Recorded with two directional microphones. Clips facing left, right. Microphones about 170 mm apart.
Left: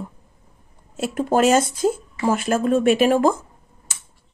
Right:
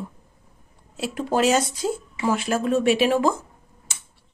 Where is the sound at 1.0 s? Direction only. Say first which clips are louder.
Left 4 dB; 50° left (ahead or behind).